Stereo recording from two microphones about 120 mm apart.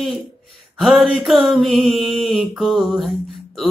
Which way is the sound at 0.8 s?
Centre (ahead or behind).